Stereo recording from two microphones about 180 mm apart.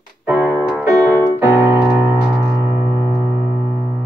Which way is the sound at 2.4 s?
15° right (ahead or behind).